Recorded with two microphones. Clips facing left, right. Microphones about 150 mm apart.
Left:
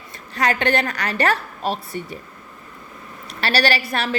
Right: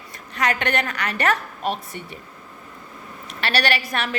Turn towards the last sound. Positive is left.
turn(degrees=35)  # may be behind; listen again after turning